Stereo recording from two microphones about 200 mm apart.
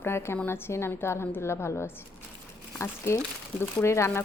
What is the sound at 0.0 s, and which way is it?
A woman's voice, 10° left (ahead or behind).